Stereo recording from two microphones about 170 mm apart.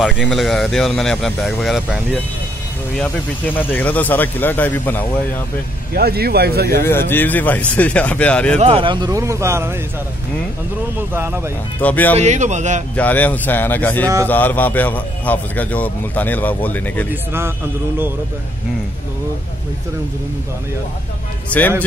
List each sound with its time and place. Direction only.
0.0 s speech: centre (ahead or behind)
3.0 s a man's voice: 10° left (ahead or behind)
5.9 s speech: 65° right (ahead or behind)
6.8 s a man's voice: 15° left (ahead or behind)
8.5 s speech: 35° right (ahead or behind); by 9.8 s 15° right (ahead or behind)
11.0 s speech: 15° right (ahead or behind)
11.8 s a man's voice: 10° left (ahead or behind)
12.2 s a man's voice: 45° right (ahead or behind)
12.9 s a man's voice: 10° left (ahead or behind)
17.1 s speech: 15° right (ahead or behind)